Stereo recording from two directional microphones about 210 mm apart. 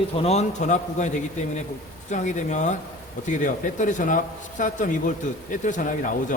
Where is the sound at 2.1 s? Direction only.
35° left (ahead or behind).